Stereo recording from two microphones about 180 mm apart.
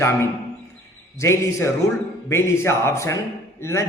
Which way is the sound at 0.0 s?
15° left (ahead or behind).